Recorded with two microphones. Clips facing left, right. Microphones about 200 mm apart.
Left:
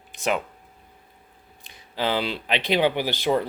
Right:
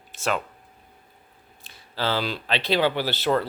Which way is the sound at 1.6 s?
15° left (ahead or behind).